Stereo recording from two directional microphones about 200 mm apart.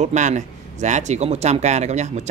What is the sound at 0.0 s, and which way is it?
Speech, 35° right (ahead or behind).